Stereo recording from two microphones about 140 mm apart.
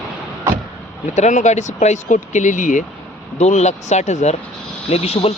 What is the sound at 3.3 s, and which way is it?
Speech, 55° left (ahead or behind).